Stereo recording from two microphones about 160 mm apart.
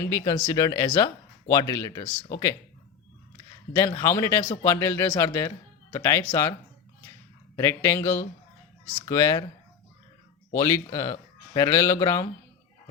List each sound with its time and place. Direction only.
0.1 s speech: 20° left (ahead or behind)
3.8 s speech: 20° left (ahead or behind)
7.5 s speech: 15° left (ahead or behind)
10.5 s speech: 20° left (ahead or behind)